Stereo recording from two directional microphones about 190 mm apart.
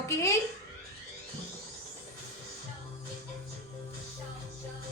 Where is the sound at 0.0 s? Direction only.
15° left (ahead or behind).